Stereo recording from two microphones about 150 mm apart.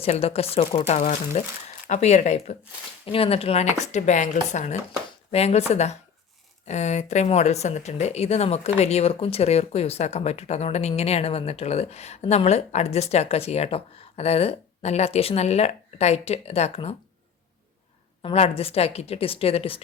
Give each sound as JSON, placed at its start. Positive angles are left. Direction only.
{"t": 0.0, "sound": "a woman's voice", "side_deg": 40}
{"t": 3.1, "sound": "speech", "side_deg": 40}
{"t": 18.2, "sound": "a woman's voice", "side_deg": 40}